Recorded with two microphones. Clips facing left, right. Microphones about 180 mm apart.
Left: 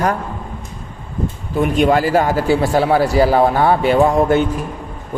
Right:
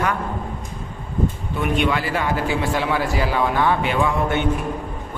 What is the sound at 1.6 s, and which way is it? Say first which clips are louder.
A man's voice: left 7 dB; 40° left (ahead or behind).